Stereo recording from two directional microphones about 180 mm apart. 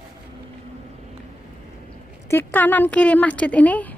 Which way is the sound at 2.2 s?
10° left (ahead or behind).